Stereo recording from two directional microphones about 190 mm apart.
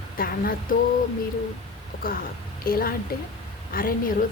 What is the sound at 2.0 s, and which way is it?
Speech, 50° left (ahead or behind).